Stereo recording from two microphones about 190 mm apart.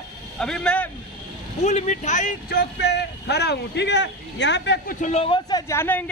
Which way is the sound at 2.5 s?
60° left (ahead or behind).